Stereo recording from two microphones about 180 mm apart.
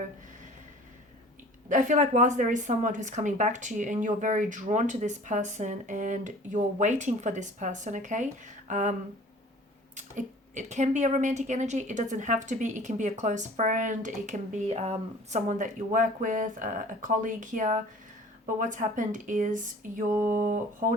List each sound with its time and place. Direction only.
1.7 s speech: 45° right (ahead or behind)